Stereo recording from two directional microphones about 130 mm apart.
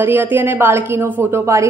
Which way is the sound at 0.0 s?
15° right (ahead or behind).